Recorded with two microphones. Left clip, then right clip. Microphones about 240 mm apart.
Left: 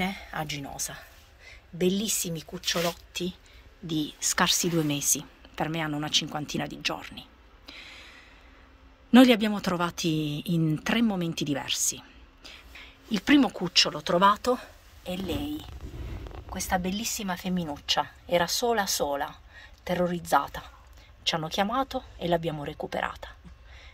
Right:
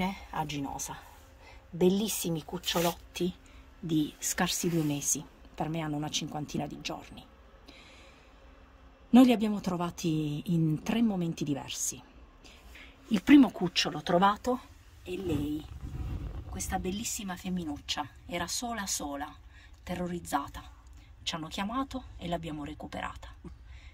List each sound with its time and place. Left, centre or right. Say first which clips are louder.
0.0 s a woman's voice: left 2 dB; centre
3.8 s a woman's voice: left 1 dB; centre
16.5 s a woman's voice: left 6 dB; centre